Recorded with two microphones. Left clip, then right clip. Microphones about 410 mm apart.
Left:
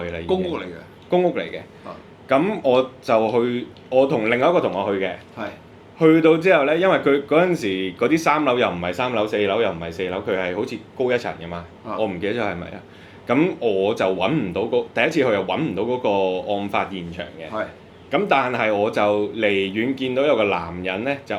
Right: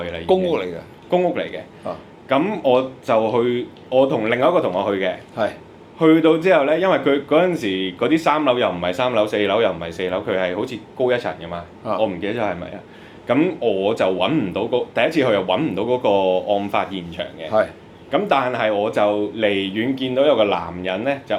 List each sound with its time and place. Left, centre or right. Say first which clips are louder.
0.0 s speech: right 1 dB; centre
0.3 s speech: right 6 dB; right
1.1 s speech: right 1 dB; centre